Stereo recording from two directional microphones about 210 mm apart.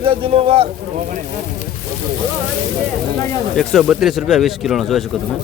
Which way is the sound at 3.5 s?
Centre (ahead or behind).